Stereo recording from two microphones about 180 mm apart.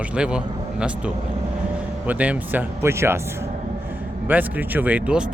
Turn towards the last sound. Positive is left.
turn(degrees=-5)  # may be behind; listen again after turning